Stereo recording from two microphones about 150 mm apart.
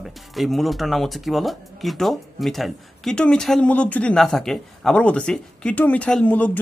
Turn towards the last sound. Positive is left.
turn(degrees=10)  # may be behind; listen again after turning